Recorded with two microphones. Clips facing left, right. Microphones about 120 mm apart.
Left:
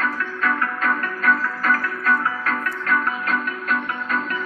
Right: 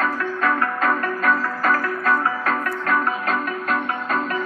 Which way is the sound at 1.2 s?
35° right (ahead or behind).